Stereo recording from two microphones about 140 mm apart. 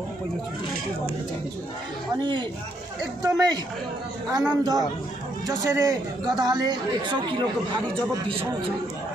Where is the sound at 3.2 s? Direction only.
25° right (ahead or behind).